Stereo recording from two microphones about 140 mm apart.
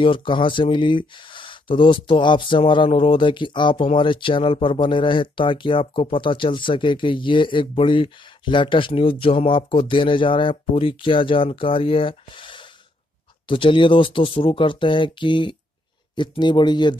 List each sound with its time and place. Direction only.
0.0 s speech: 35° left (ahead or behind)